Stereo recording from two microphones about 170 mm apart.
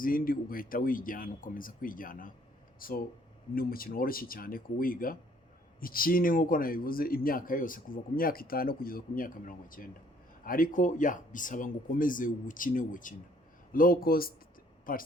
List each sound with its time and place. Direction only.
0.0 s speech: 55° left (ahead or behind)